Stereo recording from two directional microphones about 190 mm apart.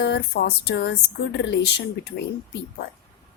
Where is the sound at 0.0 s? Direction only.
60° left (ahead or behind).